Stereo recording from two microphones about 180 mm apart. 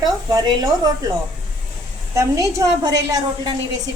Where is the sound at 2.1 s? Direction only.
20° right (ahead or behind).